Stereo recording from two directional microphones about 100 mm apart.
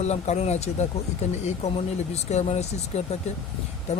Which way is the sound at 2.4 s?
90° left.